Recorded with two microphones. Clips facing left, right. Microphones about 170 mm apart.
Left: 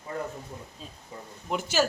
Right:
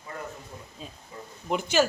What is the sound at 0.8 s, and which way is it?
Speech, centre (ahead or behind).